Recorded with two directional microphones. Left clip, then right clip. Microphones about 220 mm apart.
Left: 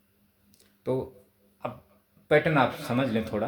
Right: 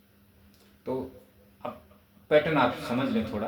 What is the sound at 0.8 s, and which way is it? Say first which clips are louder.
Speech: left 3 dB; 50° left (ahead or behind).